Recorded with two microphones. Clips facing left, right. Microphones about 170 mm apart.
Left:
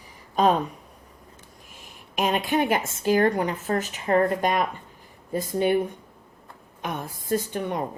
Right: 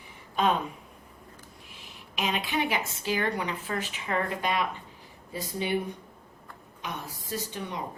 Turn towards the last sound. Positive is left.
turn(degrees=55)  # may be behind; listen again after turning